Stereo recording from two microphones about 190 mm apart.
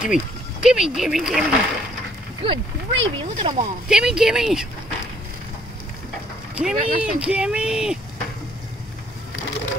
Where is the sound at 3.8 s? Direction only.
5° right (ahead or behind).